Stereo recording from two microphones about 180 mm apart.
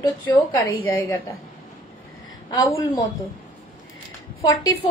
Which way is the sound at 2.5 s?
25° left (ahead or behind).